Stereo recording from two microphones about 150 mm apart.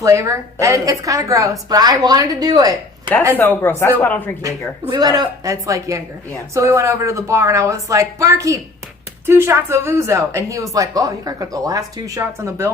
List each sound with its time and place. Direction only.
0.0 s speech: 20° right (ahead or behind)
3.3 s speech: 15° left (ahead or behind)
4.4 s speech: 20° right (ahead or behind)